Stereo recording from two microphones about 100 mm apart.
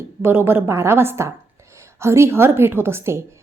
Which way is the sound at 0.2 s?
20° right (ahead or behind).